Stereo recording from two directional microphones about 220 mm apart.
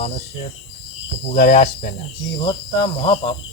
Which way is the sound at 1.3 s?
35° left (ahead or behind).